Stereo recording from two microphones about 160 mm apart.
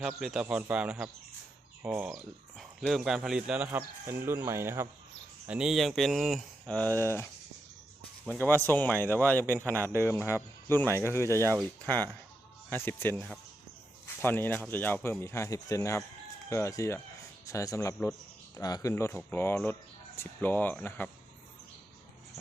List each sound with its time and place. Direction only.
0.2 s speech: 5° right (ahead or behind)
2.1 s speech: centre (ahead or behind); by 4.9 s 15° right (ahead or behind)
5.5 s speech: 5° right (ahead or behind); by 7.3 s 15° left (ahead or behind)
8.4 s speech: 10° left (ahead or behind)
12.7 s speech: 10° left (ahead or behind)
14.2 s speech: 15° left (ahead or behind)